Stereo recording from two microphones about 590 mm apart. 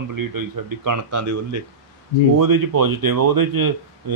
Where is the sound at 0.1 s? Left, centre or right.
Right.